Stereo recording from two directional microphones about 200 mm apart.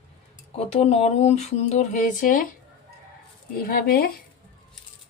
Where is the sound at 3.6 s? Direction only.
45° left (ahead or behind).